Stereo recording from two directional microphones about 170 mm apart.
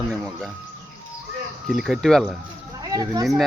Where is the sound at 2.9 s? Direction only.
20° right (ahead or behind).